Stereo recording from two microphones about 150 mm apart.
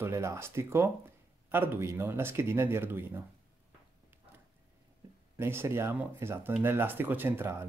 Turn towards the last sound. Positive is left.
turn(degrees=-15)  # may be behind; listen again after turning